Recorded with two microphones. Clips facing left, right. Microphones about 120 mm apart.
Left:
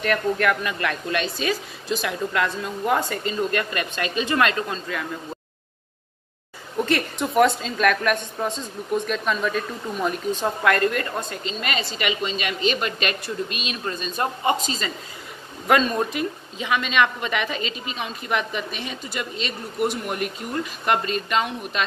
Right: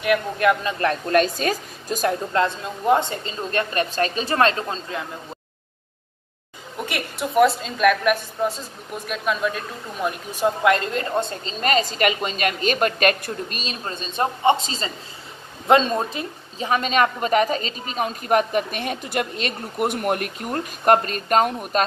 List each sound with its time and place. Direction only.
0.0 s a woman's voice: 15° right (ahead or behind)
0.7 s a woman's voice: 40° right (ahead or behind)
2.4 s a woman's voice: 25° right (ahead or behind)
6.9 s a woman's voice: 5° right (ahead or behind)
10.6 s a woman's voice: 20° right (ahead or behind); by 21.8 s 45° right (ahead or behind)